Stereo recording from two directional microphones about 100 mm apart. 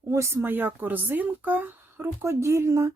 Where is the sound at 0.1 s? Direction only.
30° right (ahead or behind).